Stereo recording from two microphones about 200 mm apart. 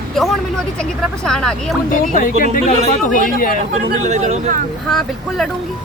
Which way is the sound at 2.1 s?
40° left (ahead or behind).